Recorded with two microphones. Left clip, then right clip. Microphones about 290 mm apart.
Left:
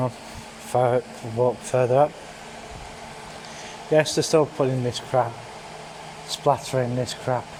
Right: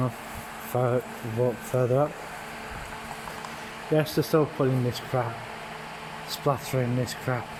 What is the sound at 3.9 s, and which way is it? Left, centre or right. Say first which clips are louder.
Speech: left 5 dB; left.